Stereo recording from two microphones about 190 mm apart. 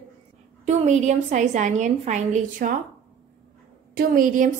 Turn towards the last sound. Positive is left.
turn(degrees=-45)  # may be behind; listen again after turning